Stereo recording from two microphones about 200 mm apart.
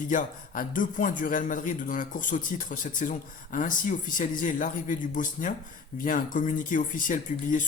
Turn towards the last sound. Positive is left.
turn(degrees=40)  # may be behind; listen again after turning